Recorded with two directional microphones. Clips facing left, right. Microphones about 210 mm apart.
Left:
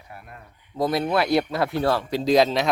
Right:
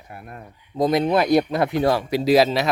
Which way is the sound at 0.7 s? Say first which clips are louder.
Right 4 dB; 20° right (ahead or behind).